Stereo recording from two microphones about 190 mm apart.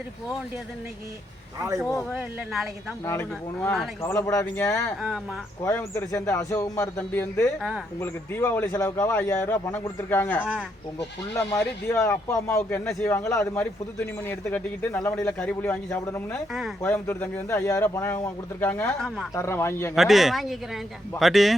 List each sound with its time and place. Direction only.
1.5 s a man's voice: 15° right (ahead or behind)
2.0 s speech: centre (ahead or behind)
3.1 s speech: 10° left (ahead or behind)
19.3 s speech: 15° left (ahead or behind)
20.0 s speech: centre (ahead or behind)